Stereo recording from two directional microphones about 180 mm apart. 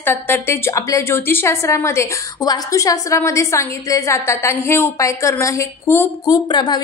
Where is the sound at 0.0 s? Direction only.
10° left (ahead or behind).